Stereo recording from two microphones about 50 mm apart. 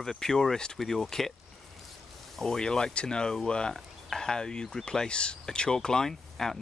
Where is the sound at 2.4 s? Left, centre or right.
Centre.